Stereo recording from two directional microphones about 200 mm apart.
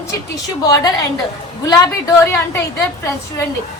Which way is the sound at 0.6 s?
20° left (ahead or behind).